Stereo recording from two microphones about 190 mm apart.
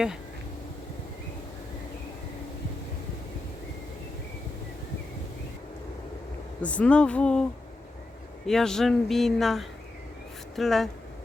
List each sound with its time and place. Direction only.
6.6 s speech: 5° left (ahead or behind)
8.4 s speech: 5° left (ahead or behind)